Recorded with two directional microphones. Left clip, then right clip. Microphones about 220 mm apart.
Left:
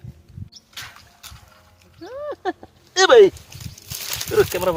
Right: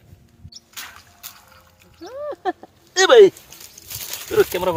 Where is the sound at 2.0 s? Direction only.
20° left (ahead or behind).